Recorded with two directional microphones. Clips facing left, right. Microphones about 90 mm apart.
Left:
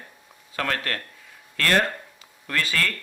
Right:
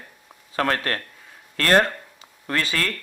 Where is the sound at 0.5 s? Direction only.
35° right (ahead or behind).